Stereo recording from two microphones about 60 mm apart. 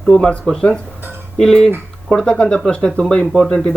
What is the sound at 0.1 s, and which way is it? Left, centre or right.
Speech, centre.